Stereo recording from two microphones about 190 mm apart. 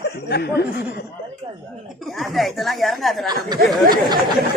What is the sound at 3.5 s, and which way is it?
Speech, 20° right (ahead or behind).